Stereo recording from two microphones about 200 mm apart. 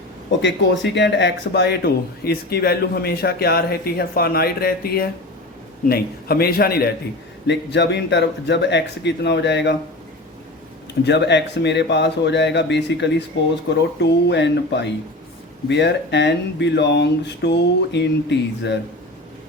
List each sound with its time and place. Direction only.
0.4 s a man's voice: 60° left (ahead or behind)
11.0 s a man's voice: 60° left (ahead or behind)